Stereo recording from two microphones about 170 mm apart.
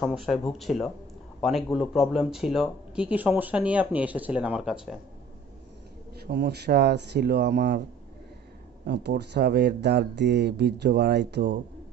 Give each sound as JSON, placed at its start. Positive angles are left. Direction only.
{"t": 0.0, "sound": "speech", "side_deg": 0}
{"t": 6.1, "sound": "speech", "side_deg": -75}
{"t": 8.8, "sound": "speech", "side_deg": -80}